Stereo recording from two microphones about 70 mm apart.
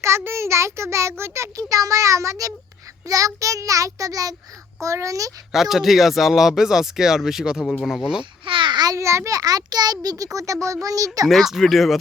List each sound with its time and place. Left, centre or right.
0.0 s a sound: right
1.2 s a child's voice: right
4.8 s a child's voice: right
5.5 s speech: centre
8.7 s a sound: right
9.0 s a child's voice: right
10.3 s a child's voice: right
11.3 s speech: centre